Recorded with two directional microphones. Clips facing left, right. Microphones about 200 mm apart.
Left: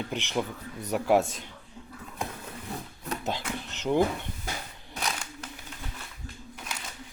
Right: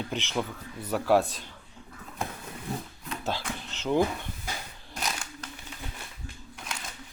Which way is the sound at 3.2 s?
15° left (ahead or behind).